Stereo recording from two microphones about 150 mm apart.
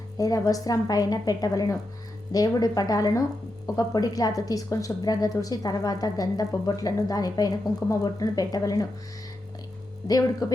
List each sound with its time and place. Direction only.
0.2 s a woman's voice: 25° left (ahead or behind)
10.4 s a woman's voice: 25° left (ahead or behind)